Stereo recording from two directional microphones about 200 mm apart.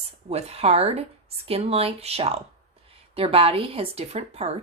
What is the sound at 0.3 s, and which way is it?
Speech, 30° right (ahead or behind).